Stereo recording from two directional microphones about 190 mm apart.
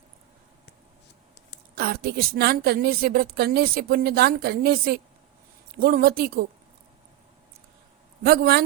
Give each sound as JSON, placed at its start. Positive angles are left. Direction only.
{"t": 1.7, "sound": "a woman's voice", "side_deg": -55}
{"t": 8.2, "sound": "a woman's voice", "side_deg": -55}